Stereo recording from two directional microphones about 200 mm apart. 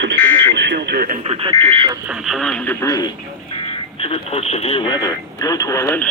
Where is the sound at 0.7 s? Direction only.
50° right (ahead or behind).